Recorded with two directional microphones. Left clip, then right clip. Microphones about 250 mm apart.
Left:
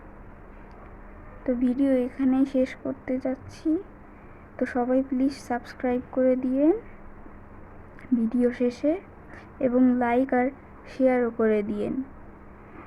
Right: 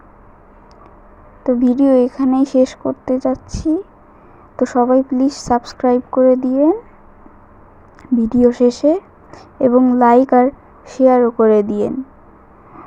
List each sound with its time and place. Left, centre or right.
1.5 s a woman's voice: centre
8.2 s speech: centre
9.7 s speech: centre
10.0 s speech: centre